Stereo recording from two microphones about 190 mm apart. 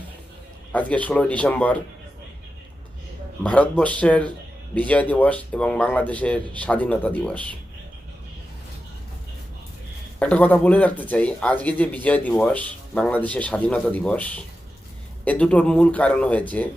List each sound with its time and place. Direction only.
0.7 s speech: 10° left (ahead or behind)
3.4 s speech: 5° left (ahead or behind)
10.2 s speech: 5° left (ahead or behind)